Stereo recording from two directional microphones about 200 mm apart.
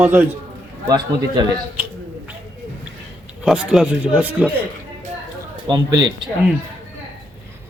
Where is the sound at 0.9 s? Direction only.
20° right (ahead or behind).